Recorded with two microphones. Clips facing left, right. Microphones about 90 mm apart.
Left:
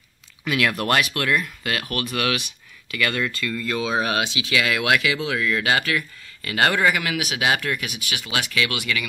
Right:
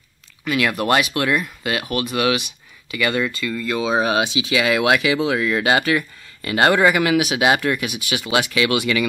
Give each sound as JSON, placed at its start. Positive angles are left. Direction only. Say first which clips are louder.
{"t": 0.5, "sound": "speech", "louder": "right 3 dB", "side_deg": -5}